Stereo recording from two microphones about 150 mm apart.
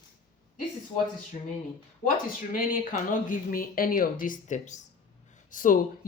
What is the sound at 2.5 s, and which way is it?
Speech, 65° left (ahead or behind).